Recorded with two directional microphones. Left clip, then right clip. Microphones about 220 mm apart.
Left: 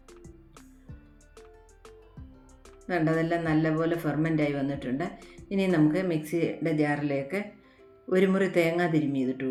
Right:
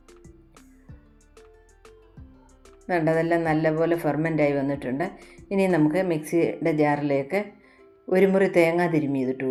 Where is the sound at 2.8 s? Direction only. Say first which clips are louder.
Right 4 dB; 15° right (ahead or behind).